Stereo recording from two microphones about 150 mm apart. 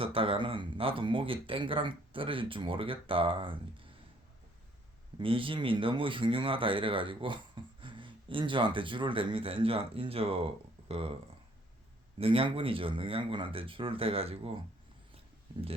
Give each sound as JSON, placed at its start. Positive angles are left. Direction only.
{"t": 0.0, "sound": "speech", "side_deg": -35}
{"t": 5.2, "sound": "speech", "side_deg": -35}
{"t": 12.2, "sound": "speech", "side_deg": -35}